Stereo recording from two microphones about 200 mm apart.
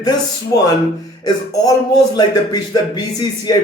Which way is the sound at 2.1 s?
20° left (ahead or behind).